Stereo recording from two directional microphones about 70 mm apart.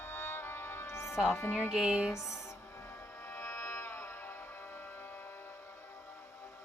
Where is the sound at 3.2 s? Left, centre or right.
Left.